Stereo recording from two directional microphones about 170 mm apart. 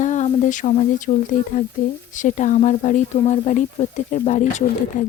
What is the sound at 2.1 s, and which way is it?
Speech, 45° left (ahead or behind).